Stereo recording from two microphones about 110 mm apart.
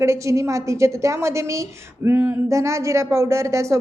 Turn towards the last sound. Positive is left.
turn(degrees=-25)  # may be behind; listen again after turning